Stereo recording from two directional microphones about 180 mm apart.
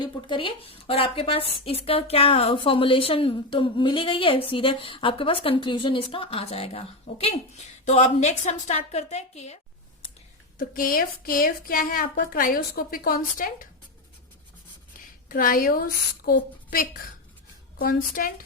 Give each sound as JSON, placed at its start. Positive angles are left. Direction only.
{"t": 0.0, "sound": "a woman's voice", "side_deg": 25}
{"t": 10.6, "sound": "a woman's voice", "side_deg": 50}
{"t": 15.3, "sound": "a woman's voice", "side_deg": 50}